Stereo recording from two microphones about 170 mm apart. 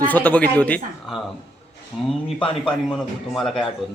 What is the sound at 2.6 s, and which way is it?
Speech, 5° left (ahead or behind).